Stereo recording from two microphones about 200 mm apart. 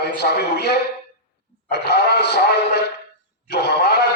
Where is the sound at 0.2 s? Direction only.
55° left (ahead or behind).